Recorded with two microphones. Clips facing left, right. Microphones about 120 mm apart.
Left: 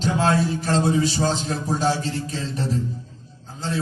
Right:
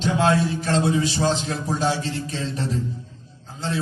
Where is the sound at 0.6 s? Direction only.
40° left (ahead or behind).